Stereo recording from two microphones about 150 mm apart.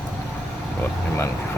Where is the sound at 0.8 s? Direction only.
15° left (ahead or behind).